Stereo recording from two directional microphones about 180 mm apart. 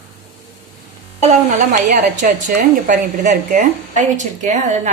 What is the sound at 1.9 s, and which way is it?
A woman's voice, 45° right (ahead or behind).